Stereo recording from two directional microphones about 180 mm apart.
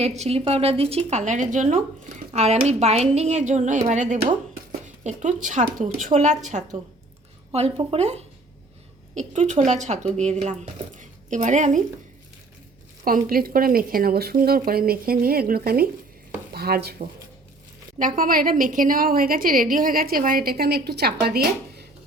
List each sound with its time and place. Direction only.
0.2 s a woman's voice: 35° right (ahead or behind)
13.1 s a woman's voice: 50° right (ahead or behind)